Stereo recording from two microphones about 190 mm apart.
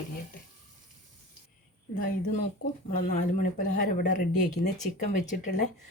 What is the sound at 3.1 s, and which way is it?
Speech, 45° left (ahead or behind).